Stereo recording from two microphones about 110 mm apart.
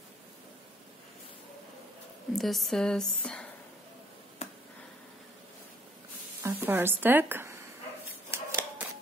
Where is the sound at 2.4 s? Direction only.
Centre (ahead or behind).